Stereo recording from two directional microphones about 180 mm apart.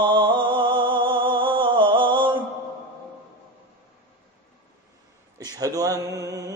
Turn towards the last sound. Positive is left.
turn(degrees=-20)  # may be behind; listen again after turning